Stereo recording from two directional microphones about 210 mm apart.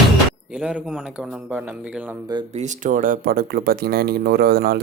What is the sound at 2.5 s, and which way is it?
Speech, 35° right (ahead or behind).